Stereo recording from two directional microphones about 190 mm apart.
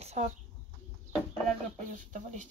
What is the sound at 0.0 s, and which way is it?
Chicken, 35° right (ahead or behind).